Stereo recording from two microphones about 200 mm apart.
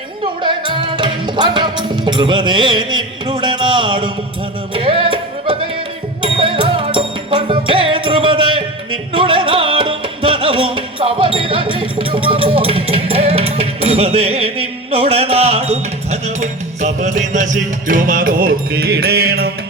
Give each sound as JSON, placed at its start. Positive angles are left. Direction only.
{"t": 0.4, "sound": "music", "side_deg": -25}